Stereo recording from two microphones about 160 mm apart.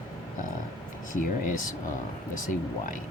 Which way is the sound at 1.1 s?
55° left (ahead or behind).